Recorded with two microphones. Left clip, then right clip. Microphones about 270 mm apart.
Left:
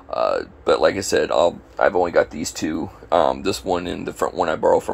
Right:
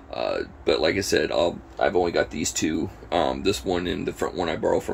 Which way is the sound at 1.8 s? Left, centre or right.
Left.